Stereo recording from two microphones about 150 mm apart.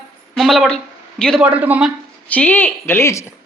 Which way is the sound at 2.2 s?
10° left (ahead or behind).